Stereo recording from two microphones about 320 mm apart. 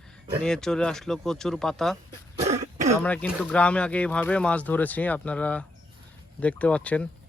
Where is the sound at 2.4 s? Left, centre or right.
Right.